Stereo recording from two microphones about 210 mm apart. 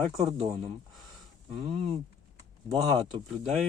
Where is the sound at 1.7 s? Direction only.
25° right (ahead or behind).